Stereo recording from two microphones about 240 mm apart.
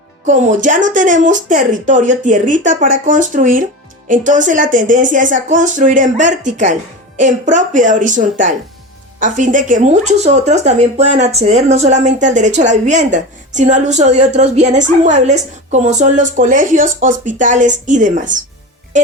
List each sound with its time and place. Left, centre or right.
0.3 s speech: right